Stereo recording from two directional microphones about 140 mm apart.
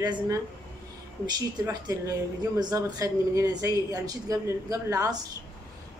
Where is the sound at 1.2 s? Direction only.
25° right (ahead or behind).